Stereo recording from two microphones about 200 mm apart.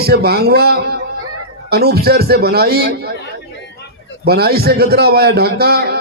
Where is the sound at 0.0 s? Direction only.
50° right (ahead or behind).